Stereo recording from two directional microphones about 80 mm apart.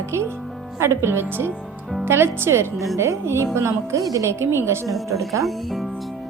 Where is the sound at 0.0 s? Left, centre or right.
Right.